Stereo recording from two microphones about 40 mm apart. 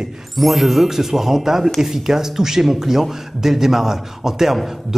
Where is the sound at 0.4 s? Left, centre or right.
Centre.